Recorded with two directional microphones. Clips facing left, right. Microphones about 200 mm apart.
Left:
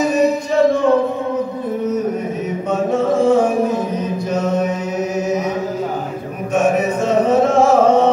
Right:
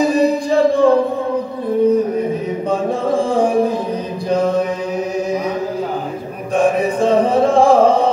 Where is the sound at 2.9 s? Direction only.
30° right (ahead or behind).